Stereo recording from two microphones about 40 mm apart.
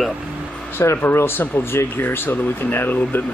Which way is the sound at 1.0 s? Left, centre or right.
Left.